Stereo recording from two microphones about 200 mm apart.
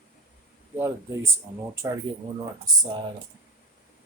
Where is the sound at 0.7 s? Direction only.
15° right (ahead or behind).